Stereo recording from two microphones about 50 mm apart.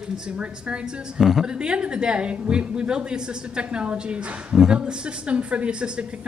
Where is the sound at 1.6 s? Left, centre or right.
Centre.